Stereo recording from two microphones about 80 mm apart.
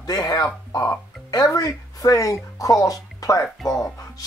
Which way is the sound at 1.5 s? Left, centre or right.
Left.